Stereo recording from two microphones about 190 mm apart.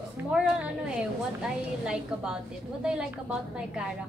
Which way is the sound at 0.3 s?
5° right (ahead or behind).